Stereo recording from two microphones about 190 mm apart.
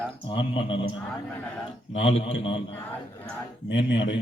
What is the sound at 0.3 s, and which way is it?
Speech, 25° left (ahead or behind).